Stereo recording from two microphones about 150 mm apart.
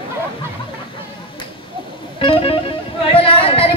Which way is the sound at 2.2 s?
40° left (ahead or behind).